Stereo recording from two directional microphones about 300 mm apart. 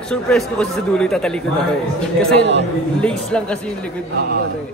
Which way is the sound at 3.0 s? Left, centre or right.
Centre.